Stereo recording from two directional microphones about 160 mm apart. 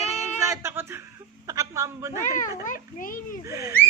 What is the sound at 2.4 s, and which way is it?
Children playing, 55° left (ahead or behind).